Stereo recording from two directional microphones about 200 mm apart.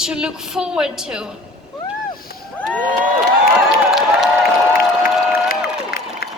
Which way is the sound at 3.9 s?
Centre (ahead or behind).